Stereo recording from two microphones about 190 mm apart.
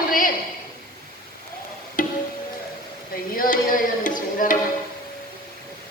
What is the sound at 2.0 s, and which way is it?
Music, 45° left (ahead or behind).